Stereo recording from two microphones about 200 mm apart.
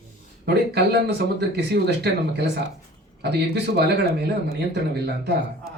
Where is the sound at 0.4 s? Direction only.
55° right (ahead or behind).